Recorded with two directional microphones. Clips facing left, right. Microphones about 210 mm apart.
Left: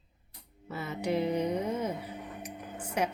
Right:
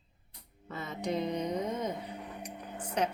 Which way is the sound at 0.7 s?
10° left (ahead or behind).